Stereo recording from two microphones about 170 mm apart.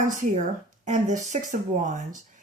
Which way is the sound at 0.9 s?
45° right (ahead or behind).